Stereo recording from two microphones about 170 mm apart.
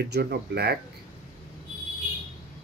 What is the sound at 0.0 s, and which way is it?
Speech, 70° right (ahead or behind).